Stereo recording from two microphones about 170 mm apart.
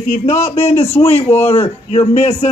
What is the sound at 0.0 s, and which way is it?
Speech, 45° left (ahead or behind).